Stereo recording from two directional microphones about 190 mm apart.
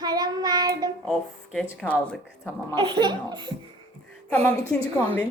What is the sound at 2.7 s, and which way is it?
Speech, 25° right (ahead or behind).